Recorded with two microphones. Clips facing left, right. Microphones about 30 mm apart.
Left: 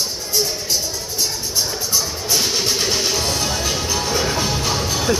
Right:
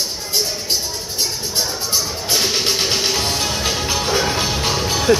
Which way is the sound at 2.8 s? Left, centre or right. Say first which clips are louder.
Right 1 dB; right.